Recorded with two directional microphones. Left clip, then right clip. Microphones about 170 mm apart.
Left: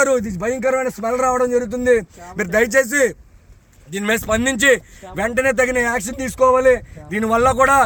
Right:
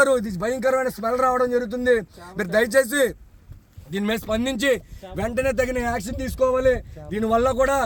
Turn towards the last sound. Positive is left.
turn(degrees=35)  # may be behind; listen again after turning